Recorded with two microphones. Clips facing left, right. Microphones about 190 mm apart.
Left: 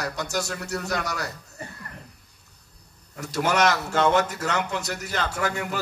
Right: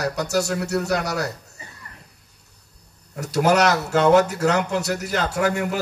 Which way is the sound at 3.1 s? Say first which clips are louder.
Right 6 dB; 40° right (ahead or behind).